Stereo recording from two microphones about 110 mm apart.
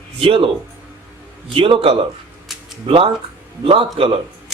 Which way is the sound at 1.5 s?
55° right (ahead or behind).